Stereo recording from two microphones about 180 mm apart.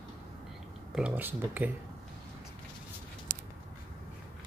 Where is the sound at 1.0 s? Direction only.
10° right (ahead or behind).